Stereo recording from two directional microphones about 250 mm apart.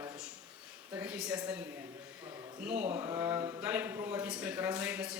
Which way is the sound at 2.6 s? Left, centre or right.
Centre.